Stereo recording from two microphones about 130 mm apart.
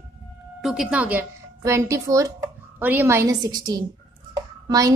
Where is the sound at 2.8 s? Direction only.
15° right (ahead or behind).